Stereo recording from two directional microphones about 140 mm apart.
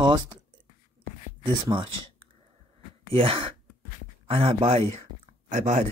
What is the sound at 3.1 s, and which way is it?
Speech, 40° right (ahead or behind).